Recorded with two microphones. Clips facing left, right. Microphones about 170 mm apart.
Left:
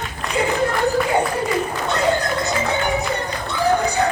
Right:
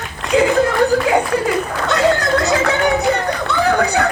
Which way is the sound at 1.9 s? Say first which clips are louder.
Right 5 dB; 90° right.